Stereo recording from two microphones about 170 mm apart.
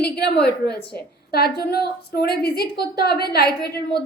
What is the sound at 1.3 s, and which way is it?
A woman's voice, 65° left (ahead or behind).